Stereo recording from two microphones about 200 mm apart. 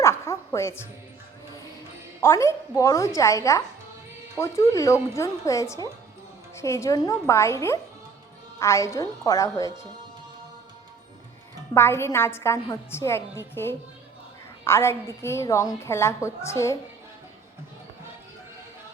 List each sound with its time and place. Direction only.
0.0 s music: 15° left (ahead or behind)
2.2 s a woman's voice: 15° left (ahead or behind)
11.7 s a woman's voice: 10° left (ahead or behind)